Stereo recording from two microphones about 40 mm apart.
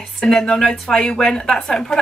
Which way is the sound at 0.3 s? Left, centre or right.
Centre.